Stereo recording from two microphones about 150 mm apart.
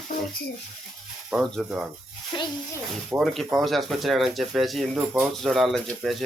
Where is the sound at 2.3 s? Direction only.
30° left (ahead or behind).